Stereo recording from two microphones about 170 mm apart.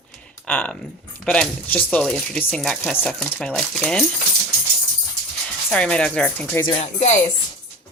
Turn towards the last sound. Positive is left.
turn(degrees=45)  # may be behind; listen again after turning